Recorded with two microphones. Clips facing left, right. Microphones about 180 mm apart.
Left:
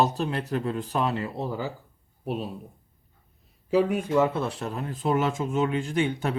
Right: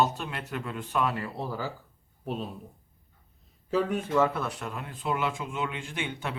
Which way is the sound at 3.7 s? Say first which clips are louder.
Left 4 dB; 10° left (ahead or behind).